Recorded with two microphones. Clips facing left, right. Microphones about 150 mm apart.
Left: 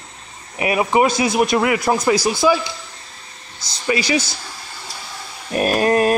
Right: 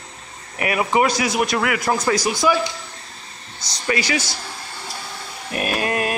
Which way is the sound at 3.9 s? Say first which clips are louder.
Left 3 dB; 30° left (ahead or behind).